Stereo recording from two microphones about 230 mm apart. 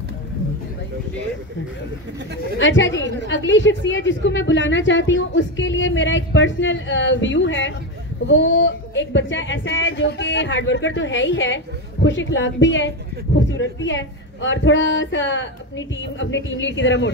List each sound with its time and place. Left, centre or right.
2.6 s a woman's voice: left